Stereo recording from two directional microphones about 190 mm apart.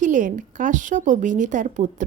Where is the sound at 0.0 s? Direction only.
40° right (ahead or behind).